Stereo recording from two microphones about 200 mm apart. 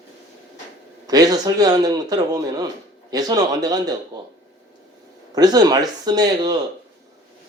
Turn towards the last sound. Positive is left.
turn(degrees=-20)  # may be behind; listen again after turning